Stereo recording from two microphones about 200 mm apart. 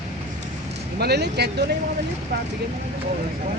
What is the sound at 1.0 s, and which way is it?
Speech, 55° right (ahead or behind).